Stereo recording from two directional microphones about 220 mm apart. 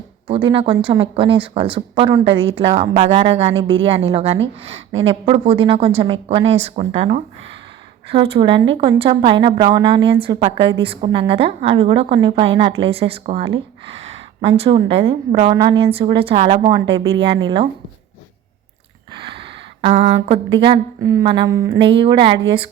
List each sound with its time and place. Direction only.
0.3 s a woman's voice: 25° right (ahead or behind)
19.3 s a sound: 25° right (ahead or behind)
21.0 s speech: 15° right (ahead or behind)
21.8 s a woman's voice: 25° right (ahead or behind)